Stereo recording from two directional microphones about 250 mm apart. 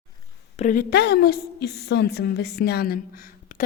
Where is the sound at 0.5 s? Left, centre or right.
Left.